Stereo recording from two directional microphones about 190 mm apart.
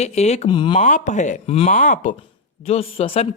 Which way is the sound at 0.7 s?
40° left (ahead or behind).